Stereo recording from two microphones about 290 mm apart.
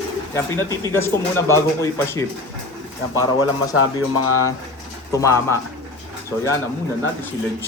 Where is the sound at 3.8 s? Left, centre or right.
Left.